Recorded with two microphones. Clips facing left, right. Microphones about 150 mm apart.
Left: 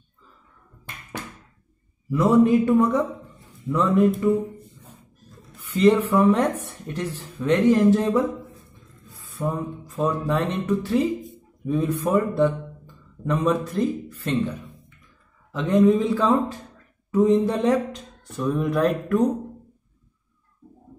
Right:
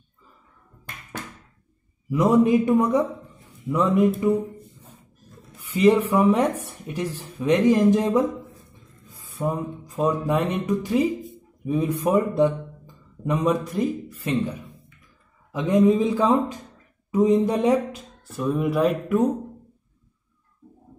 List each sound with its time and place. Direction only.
2.0 s speech: 15° right (ahead or behind)
5.6 s speech: 10° right (ahead or behind)
9.3 s speech: 15° right (ahead or behind)